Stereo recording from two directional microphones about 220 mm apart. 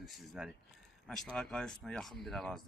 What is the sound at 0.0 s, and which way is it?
Speech, centre (ahead or behind).